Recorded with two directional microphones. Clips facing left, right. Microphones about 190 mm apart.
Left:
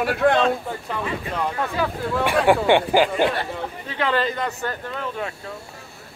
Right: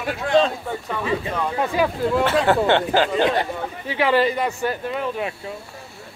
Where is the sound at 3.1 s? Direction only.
20° right (ahead or behind).